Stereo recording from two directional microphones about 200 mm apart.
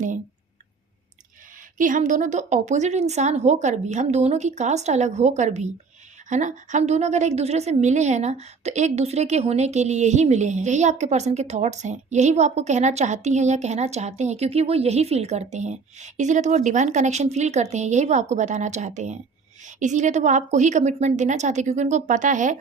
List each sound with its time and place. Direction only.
1.8 s a woman's voice: 40° right (ahead or behind)